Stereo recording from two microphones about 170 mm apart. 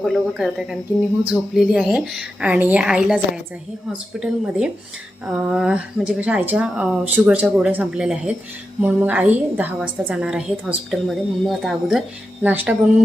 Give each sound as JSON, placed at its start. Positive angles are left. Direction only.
{"t": 0.0, "sound": "a woman's voice", "side_deg": 0}